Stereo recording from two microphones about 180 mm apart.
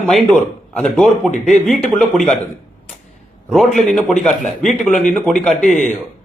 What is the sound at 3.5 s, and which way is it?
A man's voice, centre (ahead or behind).